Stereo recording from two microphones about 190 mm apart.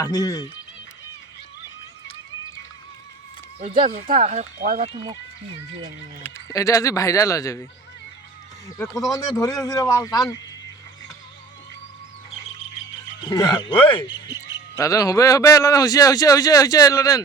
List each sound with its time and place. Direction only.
0.0 s a man's voice: 20° left (ahead or behind)
4.1 s speech: 40° right (ahead or behind)
6.2 s speech: 15° left (ahead or behind)
8.6 s speech: 15° left (ahead or behind)
13.2 s a man's voice: 20° left (ahead or behind)
14.8 s a man's voice: 15° left (ahead or behind)